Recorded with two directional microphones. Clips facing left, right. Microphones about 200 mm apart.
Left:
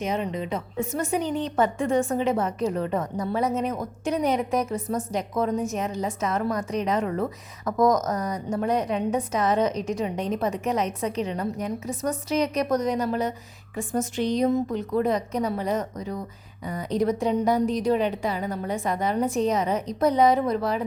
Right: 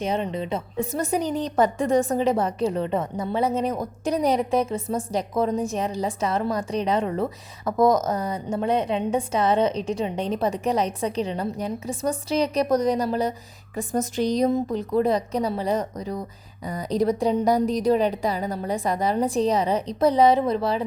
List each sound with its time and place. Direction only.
0.0 s a woman's voice: 30° right (ahead or behind)